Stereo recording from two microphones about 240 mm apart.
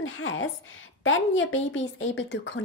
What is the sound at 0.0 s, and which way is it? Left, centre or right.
A woman's voice, left.